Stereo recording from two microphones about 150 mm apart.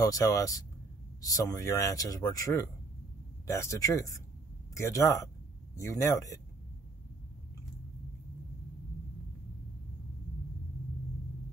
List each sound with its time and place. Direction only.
0.0 s speech: 20° left (ahead or behind)